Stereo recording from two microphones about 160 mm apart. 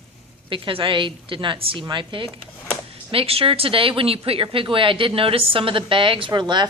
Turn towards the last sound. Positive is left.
turn(degrees=-30)  # may be behind; listen again after turning